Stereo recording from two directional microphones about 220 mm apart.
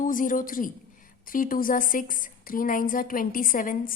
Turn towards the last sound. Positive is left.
turn(degrees=40)  # may be behind; listen again after turning